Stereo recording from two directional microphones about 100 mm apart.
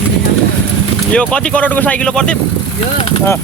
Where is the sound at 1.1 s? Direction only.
10° left (ahead or behind).